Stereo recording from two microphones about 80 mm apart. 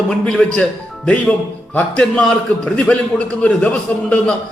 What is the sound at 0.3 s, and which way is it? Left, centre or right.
Speech, centre.